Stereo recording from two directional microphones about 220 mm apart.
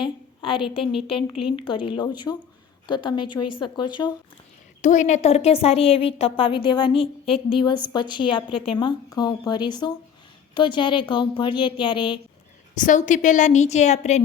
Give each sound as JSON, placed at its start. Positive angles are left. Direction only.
{"t": 0.0, "sound": "a woman's voice", "side_deg": 25}
{"t": 4.8, "sound": "a woman's voice", "side_deg": 35}
{"t": 12.7, "sound": "a woman's voice", "side_deg": 35}